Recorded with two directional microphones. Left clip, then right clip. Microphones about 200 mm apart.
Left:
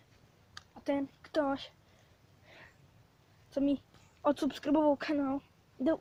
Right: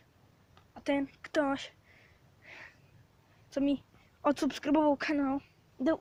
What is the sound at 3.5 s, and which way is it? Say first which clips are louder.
Speech: right 1 dB; 5° right (ahead or behind).